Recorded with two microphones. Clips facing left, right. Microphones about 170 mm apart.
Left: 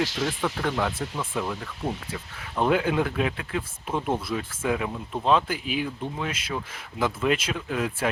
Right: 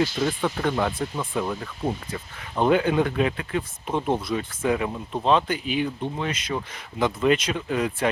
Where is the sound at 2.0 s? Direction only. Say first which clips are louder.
Right 2 dB; centre (ahead or behind).